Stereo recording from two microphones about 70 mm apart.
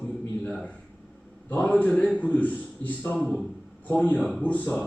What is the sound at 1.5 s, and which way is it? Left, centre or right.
A man's voice, left.